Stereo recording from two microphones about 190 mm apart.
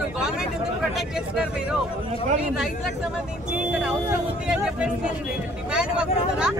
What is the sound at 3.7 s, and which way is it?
Speech, 5° right (ahead or behind).